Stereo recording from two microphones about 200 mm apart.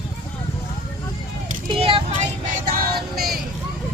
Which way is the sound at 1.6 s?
25° right (ahead or behind).